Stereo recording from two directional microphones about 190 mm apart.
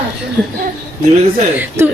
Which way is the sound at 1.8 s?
10° right (ahead or behind).